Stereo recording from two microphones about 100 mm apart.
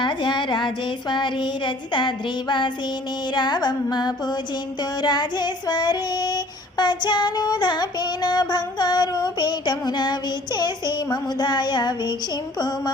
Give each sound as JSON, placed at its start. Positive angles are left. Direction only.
{"t": 0.0, "sound": "child singing", "side_deg": 50}